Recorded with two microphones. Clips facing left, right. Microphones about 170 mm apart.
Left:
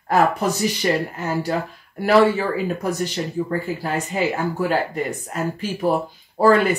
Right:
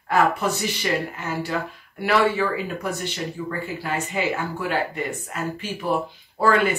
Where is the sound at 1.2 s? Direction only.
40° left (ahead or behind).